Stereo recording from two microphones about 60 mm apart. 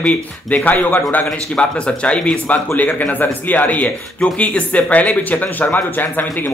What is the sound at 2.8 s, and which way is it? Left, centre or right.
A man's voice, left.